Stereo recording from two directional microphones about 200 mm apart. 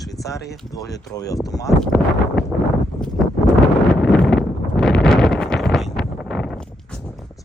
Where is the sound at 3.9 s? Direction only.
Centre (ahead or behind).